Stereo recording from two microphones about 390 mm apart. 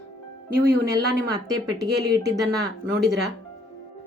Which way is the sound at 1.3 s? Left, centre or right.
Centre.